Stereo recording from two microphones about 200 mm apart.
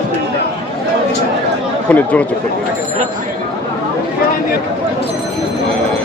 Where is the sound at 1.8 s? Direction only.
5° left (ahead or behind).